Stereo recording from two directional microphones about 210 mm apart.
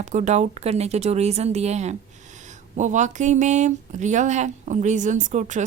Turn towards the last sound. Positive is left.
turn(degrees=-35)  # may be behind; listen again after turning